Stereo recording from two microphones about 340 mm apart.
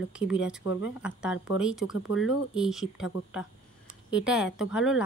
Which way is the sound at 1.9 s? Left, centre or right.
Left.